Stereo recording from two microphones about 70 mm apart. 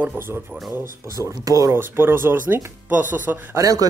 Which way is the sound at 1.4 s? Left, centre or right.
Right.